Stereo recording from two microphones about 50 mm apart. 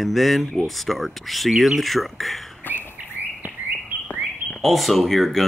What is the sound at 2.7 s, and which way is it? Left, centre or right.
Bird, left.